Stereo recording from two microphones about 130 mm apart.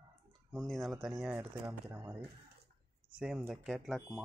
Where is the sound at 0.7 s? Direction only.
Centre (ahead or behind); by 2.0 s 15° right (ahead or behind).